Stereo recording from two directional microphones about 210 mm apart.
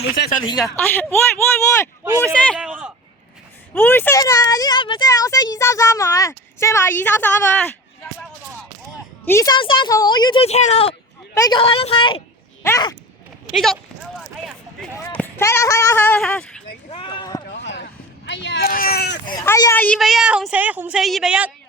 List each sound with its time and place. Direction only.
0.6 s a child's voice: 10° left (ahead or behind)
3.8 s a child's voice: 10° left (ahead or behind)
9.2 s a woman's voice: 15° left (ahead or behind)
13.5 s speech: centre (ahead or behind)
14.2 s a sound: centre (ahead or behind)
15.0 s speech: 10° left (ahead or behind)
16.9 s a sound: 25° left (ahead or behind)
17.6 s a sound: 60° left (ahead or behind)
19.2 s speech: 20° left (ahead or behind); by 21.5 s 5° right (ahead or behind)